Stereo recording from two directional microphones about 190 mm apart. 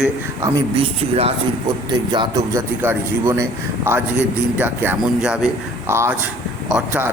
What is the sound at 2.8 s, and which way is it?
Speech, 10° right (ahead or behind).